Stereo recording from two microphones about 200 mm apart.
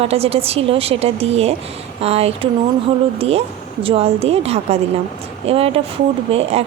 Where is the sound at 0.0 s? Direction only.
30° right (ahead or behind).